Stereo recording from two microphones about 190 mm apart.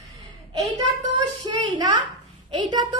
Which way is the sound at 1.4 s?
25° right (ahead or behind).